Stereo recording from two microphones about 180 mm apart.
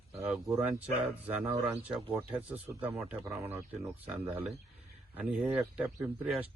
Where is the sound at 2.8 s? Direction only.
10° right (ahead or behind).